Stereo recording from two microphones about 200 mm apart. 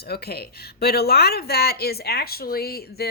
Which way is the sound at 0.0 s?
50° left (ahead or behind).